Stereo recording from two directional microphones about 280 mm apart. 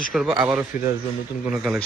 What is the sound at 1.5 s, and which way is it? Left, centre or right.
Speech, centre.